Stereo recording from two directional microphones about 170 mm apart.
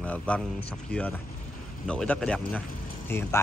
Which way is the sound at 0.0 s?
5° left (ahead or behind).